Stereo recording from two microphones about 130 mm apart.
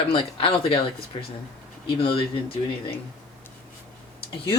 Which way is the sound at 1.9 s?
45° left (ahead or behind).